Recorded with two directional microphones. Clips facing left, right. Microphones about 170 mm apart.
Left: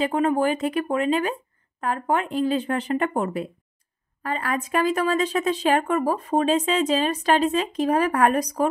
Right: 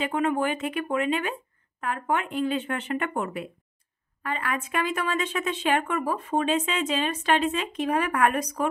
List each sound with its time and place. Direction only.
0.0 s speech: 35° left (ahead or behind)